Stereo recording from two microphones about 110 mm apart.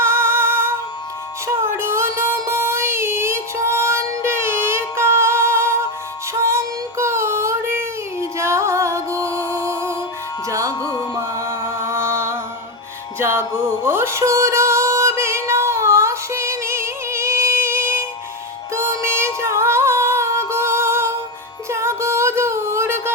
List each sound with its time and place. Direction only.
0.0 s music: 20° right (ahead or behind)
1.5 s child singing: 25° right (ahead or behind)
10.5 s music: 30° right (ahead or behind)
18.7 s female singing: 25° right (ahead or behind)
21.7 s music: 25° right (ahead or behind)